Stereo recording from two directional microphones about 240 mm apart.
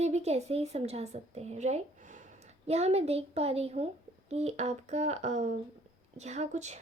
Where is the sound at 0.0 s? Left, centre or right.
Right.